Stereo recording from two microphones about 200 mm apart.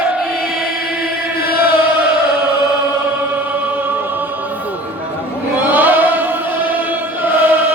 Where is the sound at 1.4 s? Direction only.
50° left (ahead or behind).